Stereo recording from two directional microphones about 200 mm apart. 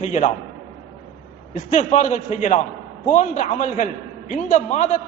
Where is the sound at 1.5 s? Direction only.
35° left (ahead or behind).